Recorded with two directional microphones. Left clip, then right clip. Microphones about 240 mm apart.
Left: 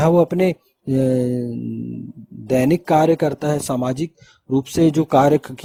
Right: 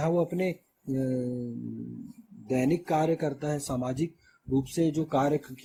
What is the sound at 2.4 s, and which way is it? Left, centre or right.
A man's voice, left.